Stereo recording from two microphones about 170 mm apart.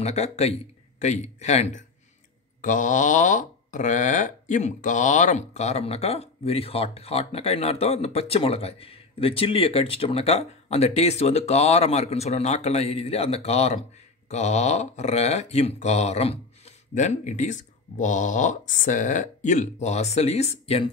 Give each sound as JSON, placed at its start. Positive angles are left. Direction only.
{"t": 0.0, "sound": "speech", "side_deg": 40}